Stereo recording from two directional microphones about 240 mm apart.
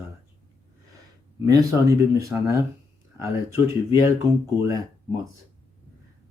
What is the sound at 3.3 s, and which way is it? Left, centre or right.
Speech, left.